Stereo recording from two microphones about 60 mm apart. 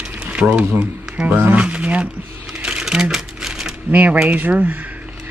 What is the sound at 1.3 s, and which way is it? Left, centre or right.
Speech, right.